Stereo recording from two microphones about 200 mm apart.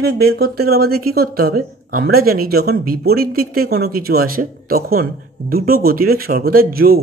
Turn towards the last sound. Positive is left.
turn(degrees=-50)  # may be behind; listen again after turning